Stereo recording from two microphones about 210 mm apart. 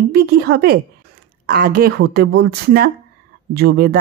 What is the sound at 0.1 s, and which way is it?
Speech, 50° right (ahead or behind).